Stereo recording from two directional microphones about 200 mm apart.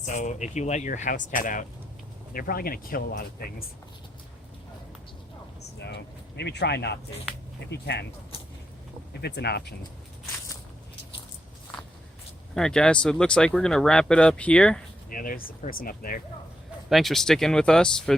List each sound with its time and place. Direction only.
0.0 s speech: 40° left (ahead or behind)
5.8 s speech: 60° left (ahead or behind)
9.2 s speech: 55° left (ahead or behind)
12.5 s speech: 5° left (ahead or behind)
15.1 s speech: 45° left (ahead or behind)
16.9 s speech: centre (ahead or behind)